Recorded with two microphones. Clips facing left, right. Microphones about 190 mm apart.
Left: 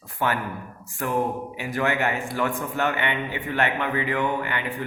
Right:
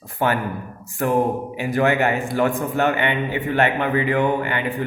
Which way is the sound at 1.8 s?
25° right (ahead or behind).